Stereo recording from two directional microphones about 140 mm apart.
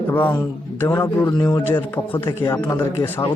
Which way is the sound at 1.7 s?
15° left (ahead or behind).